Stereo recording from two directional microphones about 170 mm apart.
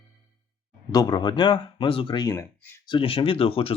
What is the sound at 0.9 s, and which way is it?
Speech, 25° left (ahead or behind).